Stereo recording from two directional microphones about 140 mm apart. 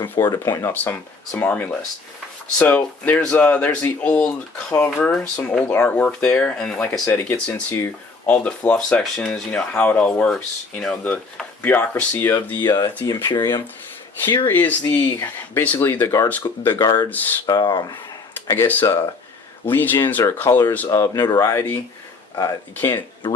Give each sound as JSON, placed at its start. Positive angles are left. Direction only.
{"t": 0.3, "sound": "speech", "side_deg": 20}
{"t": 12.5, "sound": "speech", "side_deg": 25}
{"t": 14.4, "sound": "speech", "side_deg": 15}
{"t": 18.4, "sound": "speech", "side_deg": 15}